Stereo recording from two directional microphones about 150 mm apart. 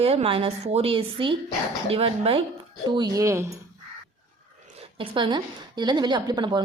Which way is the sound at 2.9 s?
25° right (ahead or behind).